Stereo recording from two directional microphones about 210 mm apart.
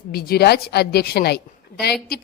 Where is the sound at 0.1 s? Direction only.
50° left (ahead or behind).